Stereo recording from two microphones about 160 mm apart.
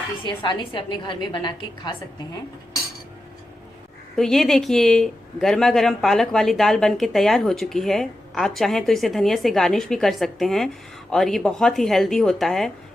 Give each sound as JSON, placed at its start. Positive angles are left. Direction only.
{"t": 0.3, "sound": "a woman's voice", "side_deg": 30}
{"t": 4.2, "sound": "speech", "side_deg": 0}